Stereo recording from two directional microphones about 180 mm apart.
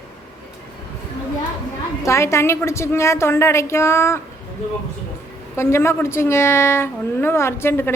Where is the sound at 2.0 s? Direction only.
15° left (ahead or behind).